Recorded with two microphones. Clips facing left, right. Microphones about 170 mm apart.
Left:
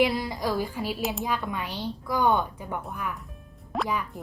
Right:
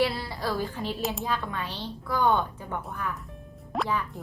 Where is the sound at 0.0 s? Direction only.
15° left (ahead or behind).